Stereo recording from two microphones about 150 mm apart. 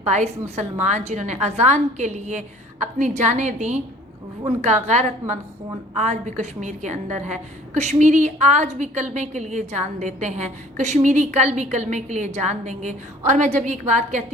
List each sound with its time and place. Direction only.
0.0 s a woman's voice: 45° right (ahead or behind)